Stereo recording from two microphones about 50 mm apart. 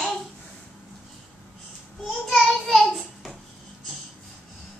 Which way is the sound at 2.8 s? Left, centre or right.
Centre.